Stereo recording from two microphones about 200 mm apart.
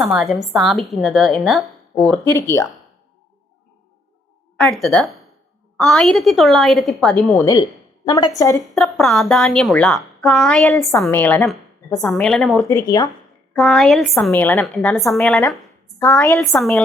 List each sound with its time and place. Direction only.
0.0 s a woman's voice: centre (ahead or behind)
4.5 s a woman's voice: 5° left (ahead or behind)
7.4 s a woman's voice: 20° left (ahead or behind)
8.7 s a woman's voice: centre (ahead or behind)
12.6 s a woman's voice: 15° left (ahead or behind)
13.5 s a woman's voice: 5° left (ahead or behind)
16.6 s a woman's voice: centre (ahead or behind)